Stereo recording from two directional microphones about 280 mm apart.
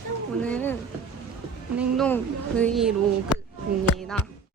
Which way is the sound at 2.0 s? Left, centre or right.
Centre.